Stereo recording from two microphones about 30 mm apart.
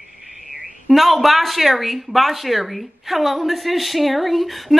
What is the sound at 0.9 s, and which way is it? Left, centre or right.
Speech, centre.